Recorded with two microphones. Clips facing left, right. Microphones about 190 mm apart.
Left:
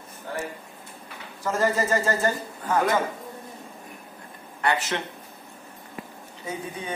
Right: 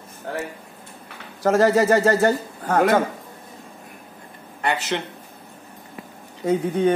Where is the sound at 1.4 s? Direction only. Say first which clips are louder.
Right 8 dB; 75° right (ahead or behind).